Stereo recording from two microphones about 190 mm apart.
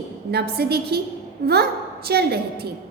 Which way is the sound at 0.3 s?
55° right (ahead or behind).